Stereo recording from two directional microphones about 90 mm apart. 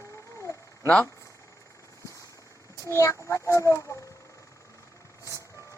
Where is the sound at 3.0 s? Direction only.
30° left (ahead or behind).